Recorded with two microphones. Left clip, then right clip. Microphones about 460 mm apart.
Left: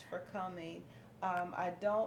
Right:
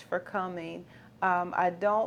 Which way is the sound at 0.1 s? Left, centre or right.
Right.